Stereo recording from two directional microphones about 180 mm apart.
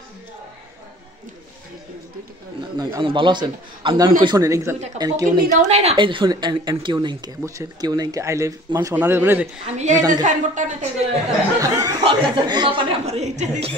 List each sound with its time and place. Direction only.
2.8 s a woman's voice: 25° right (ahead or behind)
5.5 s a woman's voice: 35° right (ahead or behind); by 9.5 s 10° right (ahead or behind)
9.7 s a woman's voice: 40° right (ahead or behind)
9.9 s a woman's voice: 20° right (ahead or behind)
10.2 s a woman's voice: 45° right (ahead or behind)
11.6 s a woman's voice: 20° right (ahead or behind); by 13.7 s 35° right (ahead or behind)